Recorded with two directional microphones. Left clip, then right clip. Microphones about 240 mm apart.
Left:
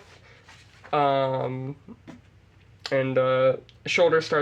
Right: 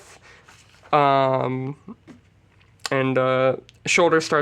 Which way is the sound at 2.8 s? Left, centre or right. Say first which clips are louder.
Right 2 dB; right.